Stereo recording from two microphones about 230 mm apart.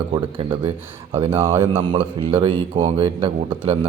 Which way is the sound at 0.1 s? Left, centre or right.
Right.